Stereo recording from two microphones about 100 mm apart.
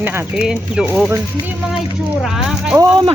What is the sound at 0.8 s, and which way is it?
Speech, 10° right (ahead or behind).